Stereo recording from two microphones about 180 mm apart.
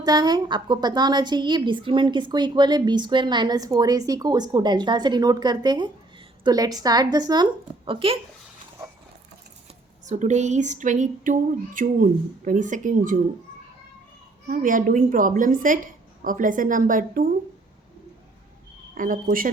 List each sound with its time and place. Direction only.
0.0 s a woman's voice: 20° right (ahead or behind)
10.1 s a woman's voice: 40° right (ahead or behind)
14.4 s a woman's voice: 50° right (ahead or behind)
18.9 s a woman's voice: 50° right (ahead or behind)